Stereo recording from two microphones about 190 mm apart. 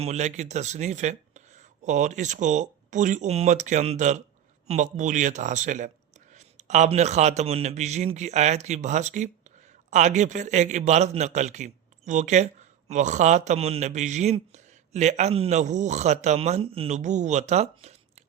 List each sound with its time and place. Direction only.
0.0 s a man's voice: 35° right (ahead or behind)